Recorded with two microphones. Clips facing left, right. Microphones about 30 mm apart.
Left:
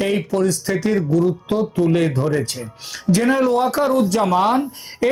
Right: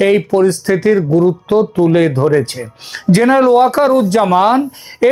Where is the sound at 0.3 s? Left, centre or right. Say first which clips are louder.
Right 7 dB; right.